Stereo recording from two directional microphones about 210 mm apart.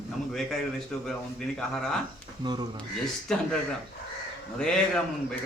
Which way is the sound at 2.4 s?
20° right (ahead or behind).